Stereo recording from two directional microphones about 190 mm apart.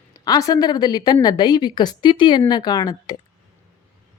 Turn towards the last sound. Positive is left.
turn(degrees=20)  # may be behind; listen again after turning